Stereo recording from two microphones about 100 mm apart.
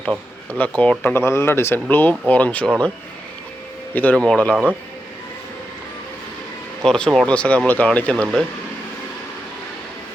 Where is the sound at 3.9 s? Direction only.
15° left (ahead or behind).